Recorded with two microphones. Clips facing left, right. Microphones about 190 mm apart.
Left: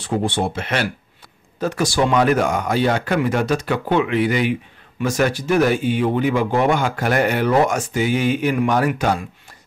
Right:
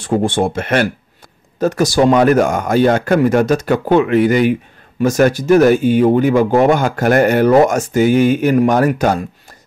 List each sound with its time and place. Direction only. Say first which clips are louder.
0.0 s speech: right 6 dB; 50° right (ahead or behind)